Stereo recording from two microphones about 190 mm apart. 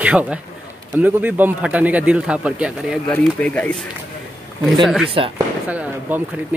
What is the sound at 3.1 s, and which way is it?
Speech, 5° left (ahead or behind).